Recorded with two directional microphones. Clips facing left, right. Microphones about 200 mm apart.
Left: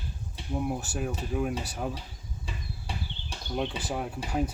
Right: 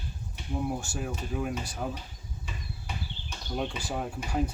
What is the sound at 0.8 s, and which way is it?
Speech, 5° left (ahead or behind).